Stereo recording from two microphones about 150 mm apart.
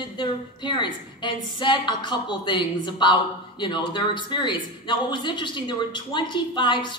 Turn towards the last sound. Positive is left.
turn(degrees=30)  # may be behind; listen again after turning